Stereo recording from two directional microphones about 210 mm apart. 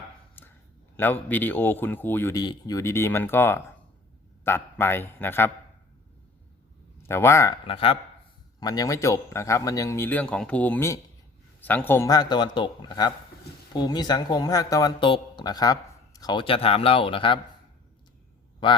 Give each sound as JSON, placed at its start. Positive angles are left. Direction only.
{"t": 0.4, "sound": "a sound", "side_deg": 10}
{"t": 0.9, "sound": "speech", "side_deg": 10}
{"t": 7.0, "sound": "speech", "side_deg": 10}
{"t": 18.6, "sound": "speech", "side_deg": 20}